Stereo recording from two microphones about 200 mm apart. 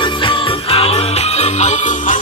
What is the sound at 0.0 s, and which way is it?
Jingle bell, 25° left (ahead or behind).